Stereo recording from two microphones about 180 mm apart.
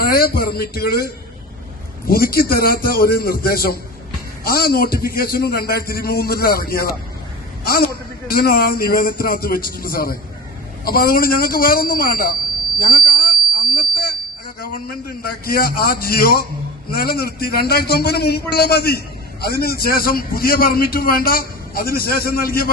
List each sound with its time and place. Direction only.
0.0 s a man's voice: 60° left (ahead or behind)
13.1 s a sound: 55° left (ahead or behind)
14.6 s a man's voice: 55° left (ahead or behind)